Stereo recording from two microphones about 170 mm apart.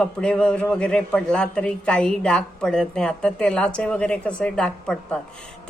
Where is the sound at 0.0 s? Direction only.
5° left (ahead or behind).